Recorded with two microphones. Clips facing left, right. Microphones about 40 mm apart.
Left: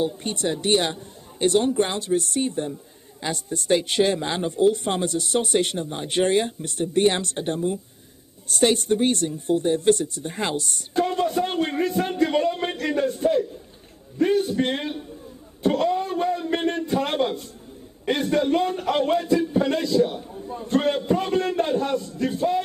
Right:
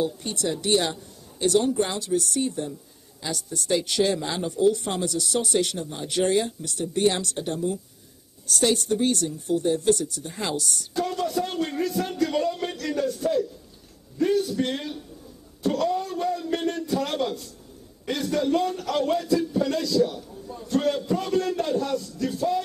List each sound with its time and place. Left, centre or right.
0.0 s speech: left
15.6 s a sound: left
18.0 s a man's voice: left